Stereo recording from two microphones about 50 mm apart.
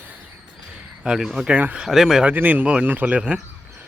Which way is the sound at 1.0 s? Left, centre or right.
Centre.